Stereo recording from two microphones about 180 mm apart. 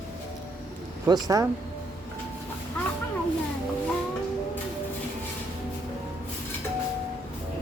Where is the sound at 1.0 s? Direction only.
20° right (ahead or behind).